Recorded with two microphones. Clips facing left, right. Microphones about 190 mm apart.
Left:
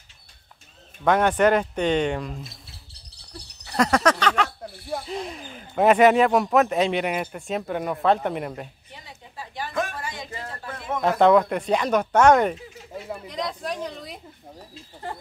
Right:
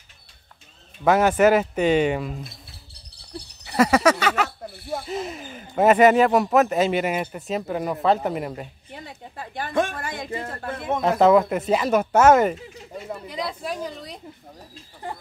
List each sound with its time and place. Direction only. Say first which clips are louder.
1.0 s speech: right 2 dB; 5° right (ahead or behind)
3.6 s speech: right 3 dB; 5° right (ahead or behind)
8.9 s a sound: right 6 dB; 55° right (ahead or behind)
10.6 s speech: right 6 dB; 60° right (ahead or behind)
11.0 s speech: right 1 dB; centre (ahead or behind)